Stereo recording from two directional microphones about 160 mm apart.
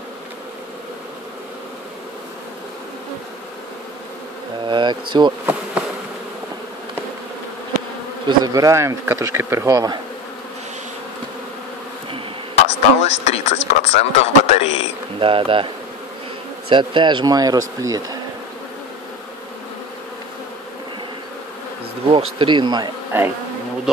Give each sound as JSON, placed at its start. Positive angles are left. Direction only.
{"t": 4.6, "sound": "speech", "side_deg": -30}
{"t": 8.3, "sound": "speech", "side_deg": -20}
{"t": 12.5, "sound": "speech", "side_deg": 40}
{"t": 15.1, "sound": "speech", "side_deg": -35}
{"t": 22.1, "sound": "speech", "side_deg": -30}